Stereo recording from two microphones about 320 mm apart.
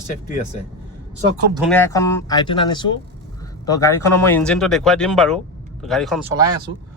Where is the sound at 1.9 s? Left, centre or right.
Centre.